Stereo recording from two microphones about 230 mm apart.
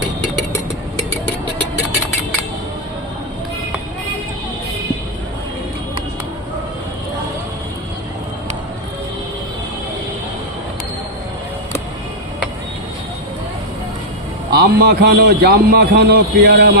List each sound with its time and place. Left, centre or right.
14.5 s a man's voice: right